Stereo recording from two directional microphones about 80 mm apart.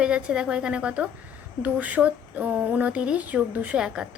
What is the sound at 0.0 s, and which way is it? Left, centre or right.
A woman's voice, centre.